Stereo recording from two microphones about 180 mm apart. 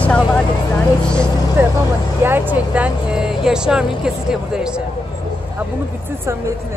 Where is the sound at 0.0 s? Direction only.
5° left (ahead or behind).